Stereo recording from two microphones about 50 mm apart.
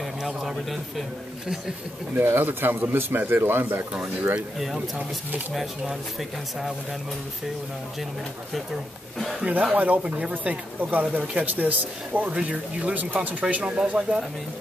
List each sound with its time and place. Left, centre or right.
0.3 s speech: centre
2.2 s speech: right
5.5 s speech: centre
9.4 s speech: right